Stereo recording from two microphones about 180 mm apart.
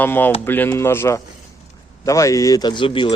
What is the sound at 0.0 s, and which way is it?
Speech, 10° left (ahead or behind).